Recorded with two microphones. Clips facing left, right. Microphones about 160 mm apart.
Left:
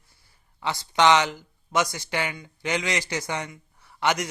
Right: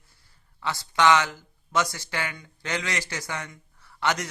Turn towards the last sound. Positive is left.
turn(degrees=15)  # may be behind; listen again after turning